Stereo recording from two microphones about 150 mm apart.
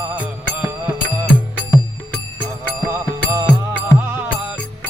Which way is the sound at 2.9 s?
20° right (ahead or behind).